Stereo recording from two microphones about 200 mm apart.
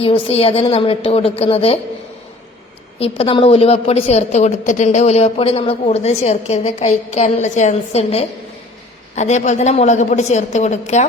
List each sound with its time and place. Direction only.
0.0 s a woman's voice: 30° left (ahead or behind)
3.0 s a woman's voice: 30° left (ahead or behind)